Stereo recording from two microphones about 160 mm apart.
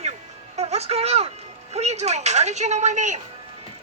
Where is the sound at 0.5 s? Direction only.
40° right (ahead or behind).